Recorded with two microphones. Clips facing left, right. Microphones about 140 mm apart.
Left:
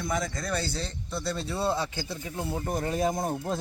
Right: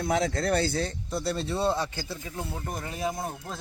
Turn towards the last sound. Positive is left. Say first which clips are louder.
# left 4 dB
turn(degrees=45)  # may be behind; listen again after turning